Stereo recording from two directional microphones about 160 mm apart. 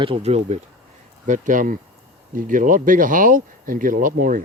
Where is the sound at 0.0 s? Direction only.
35° right (ahead or behind).